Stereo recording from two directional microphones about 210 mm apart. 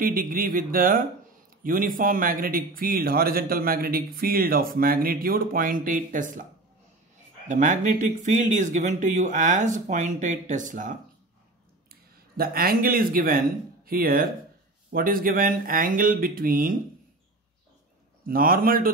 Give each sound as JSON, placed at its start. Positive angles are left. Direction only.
{"t": 0.0, "sound": "speech", "side_deg": -45}
{"t": 7.4, "sound": "speech", "side_deg": -35}
{"t": 18.2, "sound": "speech", "side_deg": -45}